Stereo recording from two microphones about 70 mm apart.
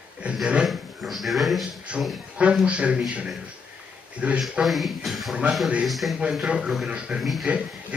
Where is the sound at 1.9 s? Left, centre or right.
Centre.